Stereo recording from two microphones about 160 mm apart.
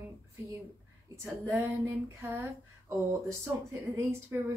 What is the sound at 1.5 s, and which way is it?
A woman's voice, 15° right (ahead or behind).